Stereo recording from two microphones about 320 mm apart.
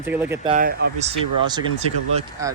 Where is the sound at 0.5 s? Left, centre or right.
Right.